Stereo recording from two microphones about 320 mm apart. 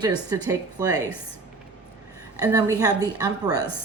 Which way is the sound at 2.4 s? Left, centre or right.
Centre.